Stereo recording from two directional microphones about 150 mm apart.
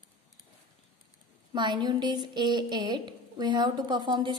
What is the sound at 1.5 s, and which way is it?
A woman's voice, 30° right (ahead or behind).